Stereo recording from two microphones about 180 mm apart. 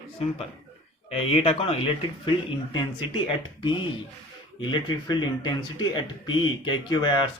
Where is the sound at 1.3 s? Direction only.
35° left (ahead or behind).